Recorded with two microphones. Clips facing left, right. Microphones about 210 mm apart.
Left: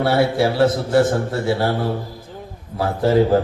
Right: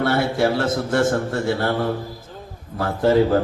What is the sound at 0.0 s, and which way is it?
A man's voice, 50° right (ahead or behind).